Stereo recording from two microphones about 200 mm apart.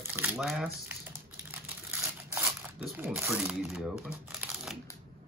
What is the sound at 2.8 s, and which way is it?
Speech, 10° right (ahead or behind).